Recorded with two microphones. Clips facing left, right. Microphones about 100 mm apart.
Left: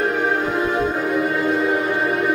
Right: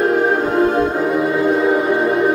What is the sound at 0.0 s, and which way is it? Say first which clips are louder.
Music: right 5 dB; 40° right (ahead or behind).